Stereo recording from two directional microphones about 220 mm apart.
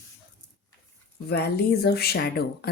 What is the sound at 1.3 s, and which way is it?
Speech, 45° left (ahead or behind).